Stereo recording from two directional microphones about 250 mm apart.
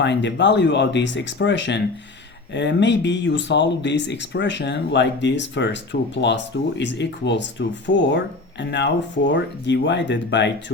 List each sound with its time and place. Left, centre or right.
0.0 s speech: left